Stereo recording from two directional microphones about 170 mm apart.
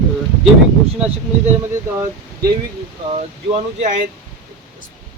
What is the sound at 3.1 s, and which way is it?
Speech, 40° right (ahead or behind).